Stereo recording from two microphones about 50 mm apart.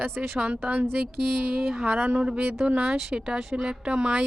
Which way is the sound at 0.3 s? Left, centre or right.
Right.